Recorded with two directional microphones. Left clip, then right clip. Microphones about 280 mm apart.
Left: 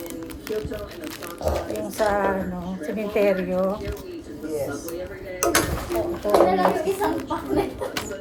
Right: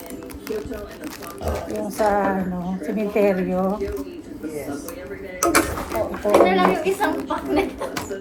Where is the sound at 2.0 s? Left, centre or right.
Centre.